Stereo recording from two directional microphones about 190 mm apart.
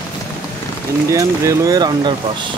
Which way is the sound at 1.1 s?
15° right (ahead or behind).